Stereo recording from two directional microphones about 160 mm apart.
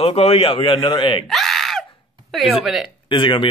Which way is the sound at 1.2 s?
Centre (ahead or behind).